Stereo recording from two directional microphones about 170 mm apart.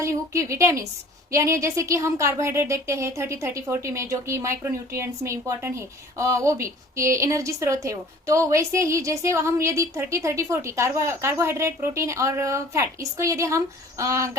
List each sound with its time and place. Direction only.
0.0 s a woman's voice: 15° right (ahead or behind)